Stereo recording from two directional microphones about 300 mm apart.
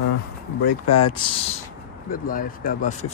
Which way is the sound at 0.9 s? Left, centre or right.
Centre.